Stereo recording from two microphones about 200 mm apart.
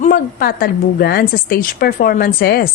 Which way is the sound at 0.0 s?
45° left (ahead or behind).